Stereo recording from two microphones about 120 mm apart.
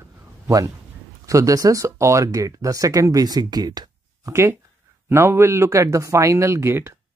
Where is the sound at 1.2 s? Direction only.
30° right (ahead or behind).